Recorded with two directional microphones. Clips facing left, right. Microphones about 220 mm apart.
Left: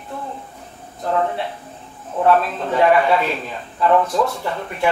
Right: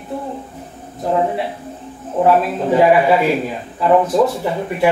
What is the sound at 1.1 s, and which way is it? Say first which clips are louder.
Speech: right 3 dB; 15° right (ahead or behind).